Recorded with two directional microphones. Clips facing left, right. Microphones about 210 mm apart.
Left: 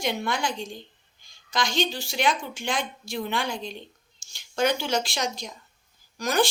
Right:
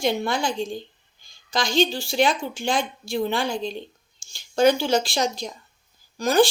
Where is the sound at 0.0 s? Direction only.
30° right (ahead or behind).